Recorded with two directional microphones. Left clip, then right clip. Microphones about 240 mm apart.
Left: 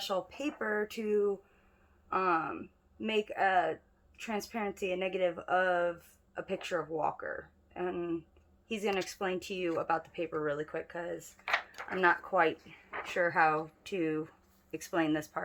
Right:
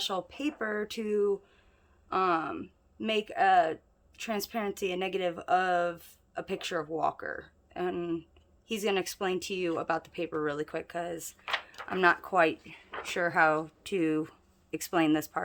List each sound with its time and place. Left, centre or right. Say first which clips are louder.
0.0 s speech: right 2 dB; right
11.4 s a sound: left 1 dB; centre
11.9 s speech: right 3 dB; right